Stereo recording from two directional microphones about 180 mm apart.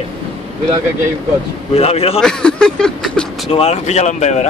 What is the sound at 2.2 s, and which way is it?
Speech, 5° left (ahead or behind).